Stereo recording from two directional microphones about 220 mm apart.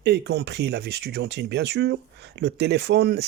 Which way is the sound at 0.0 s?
50° right (ahead or behind).